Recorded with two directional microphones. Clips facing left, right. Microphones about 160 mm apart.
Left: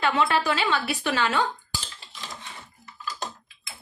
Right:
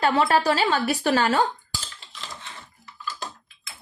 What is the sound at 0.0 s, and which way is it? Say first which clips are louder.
A woman's voice: right 3 dB; 40° right (ahead or behind).